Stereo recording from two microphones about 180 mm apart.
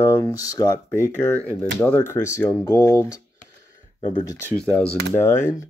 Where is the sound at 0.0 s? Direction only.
15° left (ahead or behind).